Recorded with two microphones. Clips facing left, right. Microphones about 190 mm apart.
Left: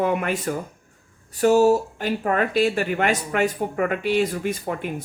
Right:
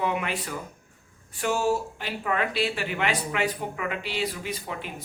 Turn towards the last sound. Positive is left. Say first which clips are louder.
# left 8 dB
turn(degrees=50)  # may be behind; listen again after turning